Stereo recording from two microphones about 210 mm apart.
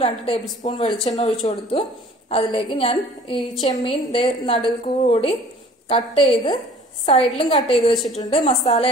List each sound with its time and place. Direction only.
0.0 s speech: 25° left (ahead or behind)
4.8 s a woman's voice: 35° left (ahead or behind)
7.9 s a woman's voice: centre (ahead or behind)
8.2 s a woman's voice: 30° left (ahead or behind)